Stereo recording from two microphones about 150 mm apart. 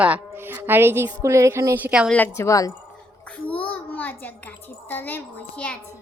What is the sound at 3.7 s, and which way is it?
A child's voice, 10° left (ahead or behind).